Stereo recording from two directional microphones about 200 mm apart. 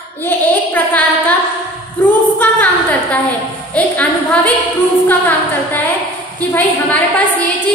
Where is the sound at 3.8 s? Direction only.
10° left (ahead or behind).